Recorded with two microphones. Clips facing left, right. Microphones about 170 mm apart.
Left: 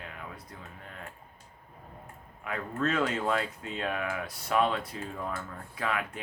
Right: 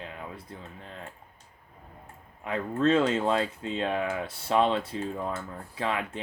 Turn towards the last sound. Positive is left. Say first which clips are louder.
# right 2 dB
turn(degrees=-25)  # may be behind; listen again after turning